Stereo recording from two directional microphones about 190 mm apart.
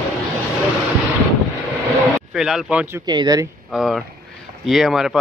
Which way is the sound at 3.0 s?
20° right (ahead or behind).